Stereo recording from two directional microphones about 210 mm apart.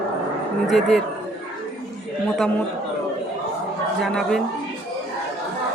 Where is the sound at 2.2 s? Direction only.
5° left (ahead or behind).